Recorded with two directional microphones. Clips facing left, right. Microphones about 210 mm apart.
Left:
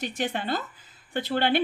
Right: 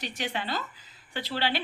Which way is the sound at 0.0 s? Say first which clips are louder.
Left 4 dB; 50° left (ahead or behind).